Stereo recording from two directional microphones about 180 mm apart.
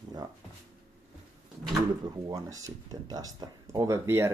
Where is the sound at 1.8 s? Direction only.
20° right (ahead or behind).